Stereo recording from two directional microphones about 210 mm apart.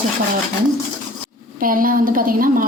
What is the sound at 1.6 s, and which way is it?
A woman's voice, 40° right (ahead or behind).